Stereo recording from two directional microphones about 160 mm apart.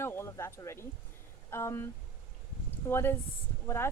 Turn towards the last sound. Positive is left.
turn(degrees=15)  # may be behind; listen again after turning